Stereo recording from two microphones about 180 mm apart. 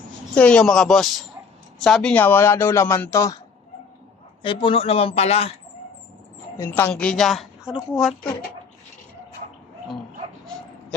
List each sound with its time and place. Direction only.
0.3 s a woman's voice: 5° left (ahead or behind)
4.4 s a man's voice: 30° left (ahead or behind)
6.6 s a woman's voice: 15° left (ahead or behind)